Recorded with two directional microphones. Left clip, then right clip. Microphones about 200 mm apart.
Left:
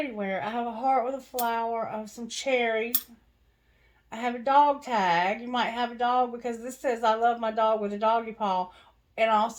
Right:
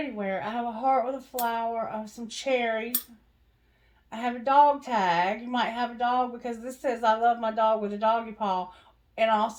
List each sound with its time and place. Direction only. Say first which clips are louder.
0.2 s a woman's voice: right 2 dB; 35° left (ahead or behind)
4.1 s a woman's voice: even; 35° left (ahead or behind)